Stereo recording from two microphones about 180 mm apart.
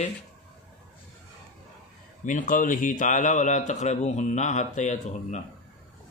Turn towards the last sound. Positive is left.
turn(degrees=40)  # may be behind; listen again after turning